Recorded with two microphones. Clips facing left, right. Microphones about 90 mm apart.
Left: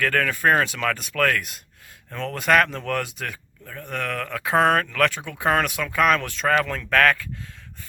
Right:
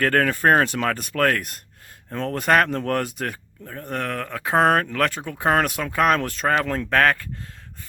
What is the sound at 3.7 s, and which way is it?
Speech, 35° right (ahead or behind).